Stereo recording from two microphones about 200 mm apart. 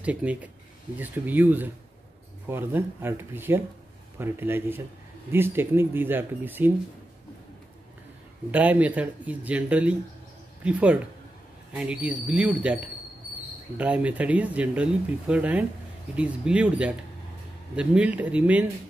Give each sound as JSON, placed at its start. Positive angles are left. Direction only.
{"t": 0.0, "sound": "speech", "side_deg": -5}
{"t": 8.5, "sound": "speech", "side_deg": -10}